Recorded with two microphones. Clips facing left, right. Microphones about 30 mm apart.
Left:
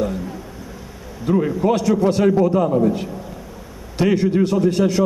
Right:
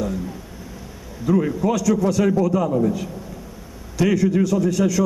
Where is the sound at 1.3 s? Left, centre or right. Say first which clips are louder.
Left 2 dB; left.